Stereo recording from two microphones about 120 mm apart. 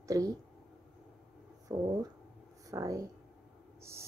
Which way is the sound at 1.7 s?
35° right (ahead or behind).